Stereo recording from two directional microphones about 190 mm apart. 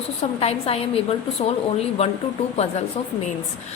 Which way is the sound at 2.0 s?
35° left (ahead or behind).